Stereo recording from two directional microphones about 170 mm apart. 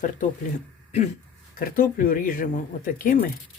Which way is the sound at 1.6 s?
55° left (ahead or behind).